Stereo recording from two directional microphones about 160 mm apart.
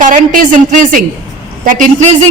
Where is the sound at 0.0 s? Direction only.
50° right (ahead or behind).